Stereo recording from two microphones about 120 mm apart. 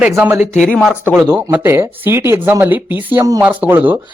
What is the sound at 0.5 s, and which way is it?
Speech, 5° left (ahead or behind).